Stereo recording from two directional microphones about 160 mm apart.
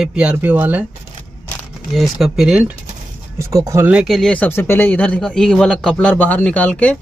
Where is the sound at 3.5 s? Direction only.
15° right (ahead or behind).